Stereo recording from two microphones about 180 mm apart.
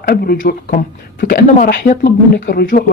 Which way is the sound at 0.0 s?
60° left (ahead or behind).